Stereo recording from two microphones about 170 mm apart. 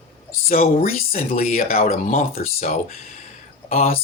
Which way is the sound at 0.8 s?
55° left (ahead or behind).